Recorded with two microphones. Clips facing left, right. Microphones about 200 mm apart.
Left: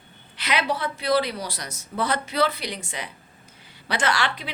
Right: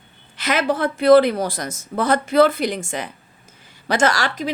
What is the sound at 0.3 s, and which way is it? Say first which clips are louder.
Speech: right 5 dB; 45° right (ahead or behind).